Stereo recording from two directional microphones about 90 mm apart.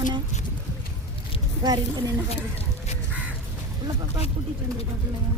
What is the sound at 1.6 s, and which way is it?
Speech, 45° right (ahead or behind).